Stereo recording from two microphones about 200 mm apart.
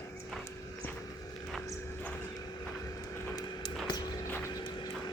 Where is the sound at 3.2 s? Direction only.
20° left (ahead or behind).